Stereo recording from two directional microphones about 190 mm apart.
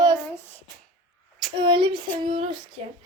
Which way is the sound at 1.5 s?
25° right (ahead or behind).